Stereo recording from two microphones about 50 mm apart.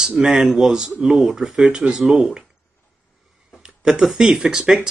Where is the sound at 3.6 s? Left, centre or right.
Centre.